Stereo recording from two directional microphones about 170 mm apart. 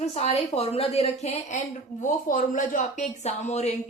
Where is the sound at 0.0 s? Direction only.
35° left (ahead or behind).